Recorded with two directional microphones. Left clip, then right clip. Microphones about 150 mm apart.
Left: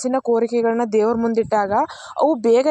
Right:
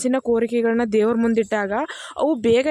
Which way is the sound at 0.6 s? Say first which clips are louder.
Left 1 dB; 35° right (ahead or behind).